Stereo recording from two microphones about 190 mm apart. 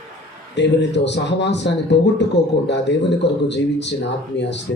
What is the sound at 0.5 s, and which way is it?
A man's voice, 65° left (ahead or behind).